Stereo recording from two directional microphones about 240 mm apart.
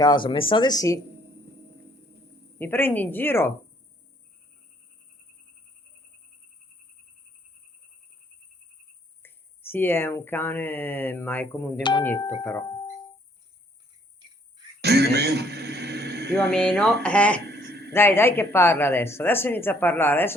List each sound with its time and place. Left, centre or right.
0.0 s speech: centre
2.6 s speech: centre
9.2 s speech: centre
11.8 s speech: centre
14.8 s music: right
16.3 s speech: centre
17.5 s a sound: right
17.9 s speech: centre